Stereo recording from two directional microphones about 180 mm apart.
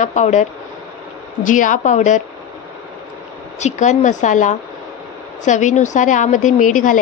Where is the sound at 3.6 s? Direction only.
40° left (ahead or behind).